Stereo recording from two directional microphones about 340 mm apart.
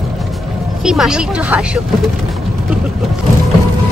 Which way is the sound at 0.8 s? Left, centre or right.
Centre.